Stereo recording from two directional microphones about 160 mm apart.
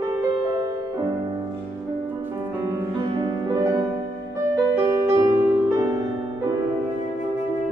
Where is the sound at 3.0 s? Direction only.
25° right (ahead or behind).